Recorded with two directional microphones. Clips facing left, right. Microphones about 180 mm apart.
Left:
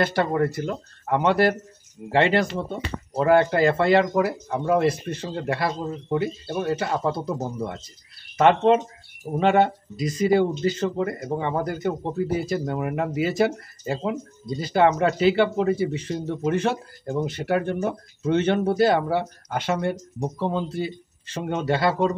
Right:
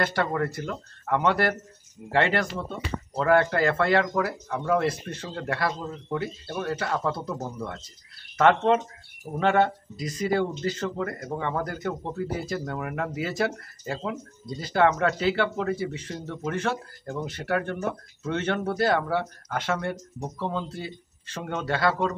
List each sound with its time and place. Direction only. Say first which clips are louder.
0.0 s speech: left 4 dB; 25° left (ahead or behind)